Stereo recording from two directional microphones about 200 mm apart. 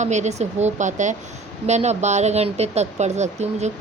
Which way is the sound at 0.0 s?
35° right (ahead or behind).